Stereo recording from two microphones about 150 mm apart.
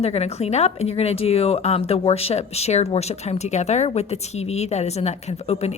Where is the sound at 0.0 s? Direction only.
45° left (ahead or behind).